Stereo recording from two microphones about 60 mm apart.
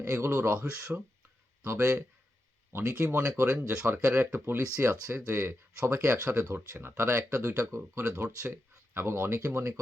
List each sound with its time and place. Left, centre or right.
0.0 s speech: right
3.0 s speech: right
4.5 s speech: right